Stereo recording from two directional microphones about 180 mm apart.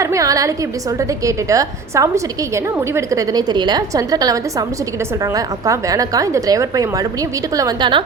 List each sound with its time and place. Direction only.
0.0 s a woman's voice: 15° right (ahead or behind)